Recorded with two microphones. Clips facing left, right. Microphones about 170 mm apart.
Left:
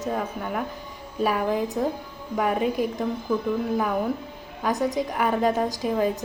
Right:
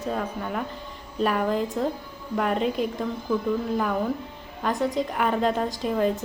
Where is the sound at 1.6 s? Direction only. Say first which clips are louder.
Left 1 dB; 20° left (ahead or behind).